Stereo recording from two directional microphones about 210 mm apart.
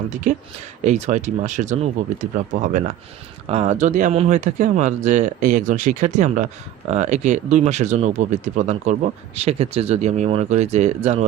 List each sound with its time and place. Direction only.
0.1 s speech: 35° right (ahead or behind)